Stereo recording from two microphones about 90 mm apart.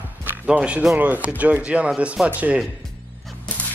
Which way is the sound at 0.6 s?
10° right (ahead or behind).